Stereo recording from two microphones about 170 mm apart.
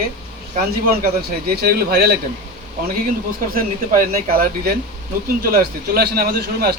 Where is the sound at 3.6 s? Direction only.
55° right (ahead or behind).